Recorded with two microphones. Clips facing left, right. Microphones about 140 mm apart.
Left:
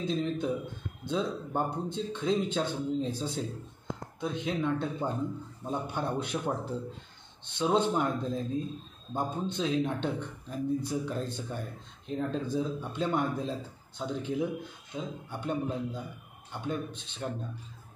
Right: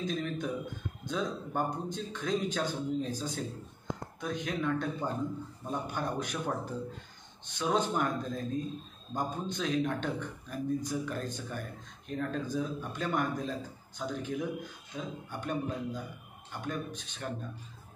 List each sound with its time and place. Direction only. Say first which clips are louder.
0.0 s a man's voice: left 3 dB; 25° left (ahead or behind)